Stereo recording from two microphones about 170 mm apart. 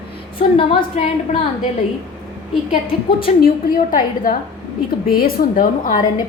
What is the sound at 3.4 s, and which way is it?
A woman's voice, 55° left (ahead or behind).